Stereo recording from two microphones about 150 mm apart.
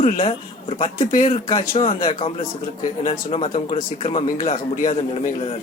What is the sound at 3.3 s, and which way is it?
Speech, 45° left (ahead or behind).